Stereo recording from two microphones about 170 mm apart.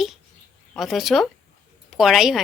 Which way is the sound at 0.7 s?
Centre (ahead or behind).